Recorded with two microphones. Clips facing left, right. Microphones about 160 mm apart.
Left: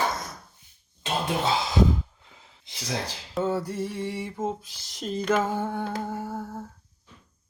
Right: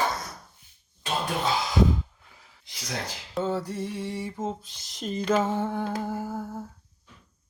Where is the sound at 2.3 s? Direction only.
25° left (ahead or behind).